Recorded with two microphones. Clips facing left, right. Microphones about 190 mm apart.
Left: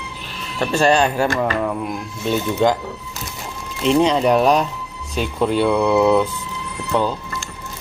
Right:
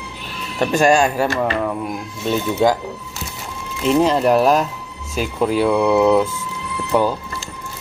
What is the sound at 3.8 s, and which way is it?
Speech, 5° right (ahead or behind).